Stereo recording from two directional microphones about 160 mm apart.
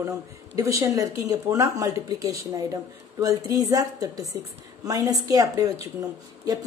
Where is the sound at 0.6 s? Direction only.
20° right (ahead or behind).